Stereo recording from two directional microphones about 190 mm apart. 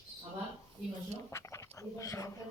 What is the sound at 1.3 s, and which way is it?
Speech, 15° left (ahead or behind).